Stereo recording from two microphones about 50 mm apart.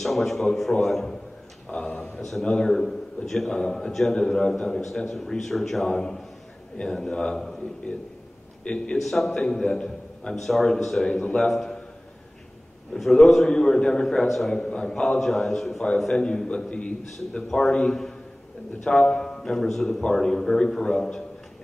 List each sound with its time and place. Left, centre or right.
0.0 s a man's voice: centre
1.7 s a sound: left
2.4 s a man's voice: centre
2.8 s a sound: centre
3.3 s a man's voice: centre
8.6 s a man's voice: left
8.9 s a man's voice: centre
10.3 s a man's voice: centre
12.9 s a man's voice: centre
14.8 s a man's voice: centre